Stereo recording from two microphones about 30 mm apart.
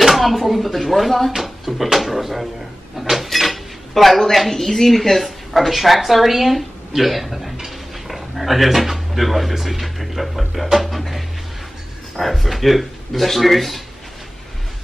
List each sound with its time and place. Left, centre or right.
0.1 s speech: centre